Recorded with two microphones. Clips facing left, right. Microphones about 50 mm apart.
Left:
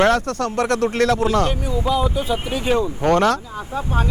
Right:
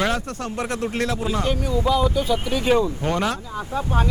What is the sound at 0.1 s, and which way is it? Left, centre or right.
Speech, left.